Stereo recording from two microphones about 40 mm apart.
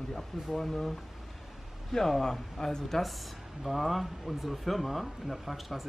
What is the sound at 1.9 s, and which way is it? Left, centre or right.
A man's voice, centre.